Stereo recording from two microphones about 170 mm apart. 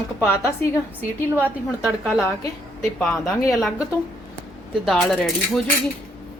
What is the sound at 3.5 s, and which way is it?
Speech, centre (ahead or behind).